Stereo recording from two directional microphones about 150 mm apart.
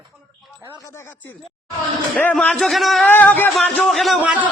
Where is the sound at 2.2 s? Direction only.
10° left (ahead or behind).